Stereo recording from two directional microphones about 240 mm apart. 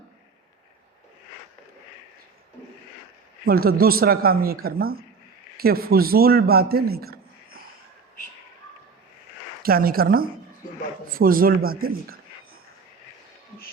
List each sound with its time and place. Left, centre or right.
3.4 s a man's voice: right
9.6 s speech: right